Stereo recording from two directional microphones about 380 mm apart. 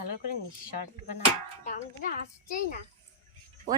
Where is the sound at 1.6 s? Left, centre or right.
Centre.